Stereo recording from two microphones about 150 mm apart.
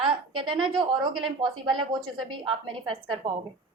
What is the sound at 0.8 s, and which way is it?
A woman's voice, 30° right (ahead or behind).